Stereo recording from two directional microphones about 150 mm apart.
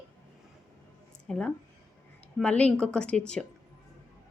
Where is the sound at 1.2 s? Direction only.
5° left (ahead or behind).